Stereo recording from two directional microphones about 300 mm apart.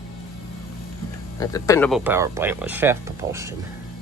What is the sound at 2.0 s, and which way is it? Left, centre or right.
Speech, centre.